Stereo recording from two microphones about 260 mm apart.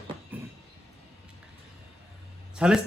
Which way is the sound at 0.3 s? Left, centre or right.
Centre.